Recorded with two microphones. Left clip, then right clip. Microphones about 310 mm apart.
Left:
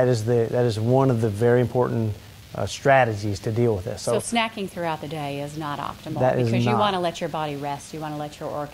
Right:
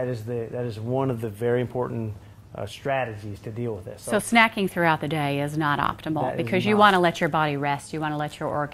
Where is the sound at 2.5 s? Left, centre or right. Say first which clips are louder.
Left 9 dB; left.